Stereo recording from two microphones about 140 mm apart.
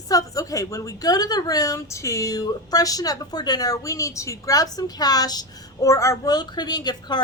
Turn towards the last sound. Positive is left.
turn(degrees=30)  # may be behind; listen again after turning